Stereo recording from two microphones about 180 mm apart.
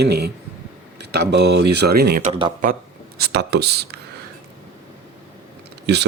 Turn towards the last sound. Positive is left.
turn(degrees=-70)  # may be behind; listen again after turning